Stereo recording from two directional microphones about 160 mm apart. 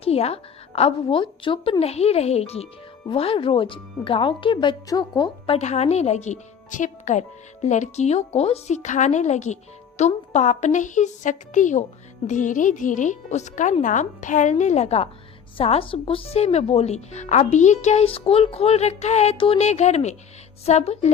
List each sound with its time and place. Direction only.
0.0 s a woman's voice: 40° left (ahead or behind)
5.5 s a woman's voice: 45° left (ahead or behind)